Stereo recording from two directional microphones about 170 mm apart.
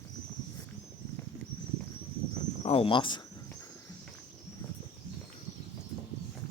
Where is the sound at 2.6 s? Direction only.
35° left (ahead or behind).